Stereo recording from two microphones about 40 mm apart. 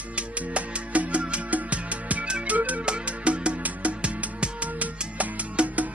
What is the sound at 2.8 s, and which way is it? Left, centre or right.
Music, right.